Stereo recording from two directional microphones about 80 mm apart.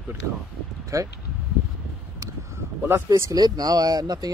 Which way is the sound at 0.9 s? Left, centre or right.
Right.